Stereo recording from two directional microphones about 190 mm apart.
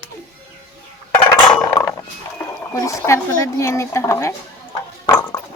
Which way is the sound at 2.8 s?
15° left (ahead or behind).